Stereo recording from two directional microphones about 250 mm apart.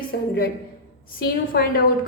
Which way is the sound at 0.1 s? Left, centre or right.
Left.